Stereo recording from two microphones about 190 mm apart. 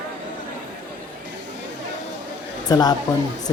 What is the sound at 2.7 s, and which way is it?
Speech, 20° left (ahead or behind).